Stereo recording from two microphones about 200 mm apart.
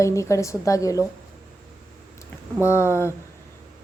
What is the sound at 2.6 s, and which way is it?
Speech, 15° left (ahead or behind).